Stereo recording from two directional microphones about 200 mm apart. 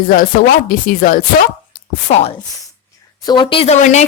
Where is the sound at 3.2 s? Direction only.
25° left (ahead or behind).